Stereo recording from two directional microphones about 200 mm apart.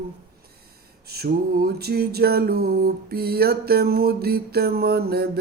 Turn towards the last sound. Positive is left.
turn(degrees=-50)  # may be behind; listen again after turning